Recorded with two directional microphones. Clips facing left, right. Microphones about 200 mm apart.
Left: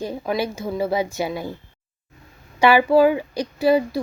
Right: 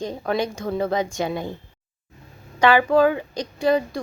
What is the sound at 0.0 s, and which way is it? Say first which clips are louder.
A woman's voice: even; 5° left (ahead or behind).